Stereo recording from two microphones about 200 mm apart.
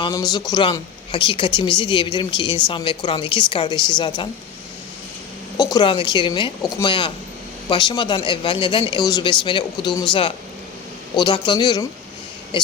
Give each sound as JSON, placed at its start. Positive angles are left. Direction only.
{"t": 0.0, "sound": "speech", "side_deg": 20}
{"t": 5.7, "sound": "speech", "side_deg": 25}